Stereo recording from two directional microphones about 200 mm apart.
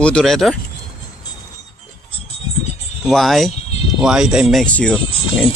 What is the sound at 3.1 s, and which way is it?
Speech, centre (ahead or behind).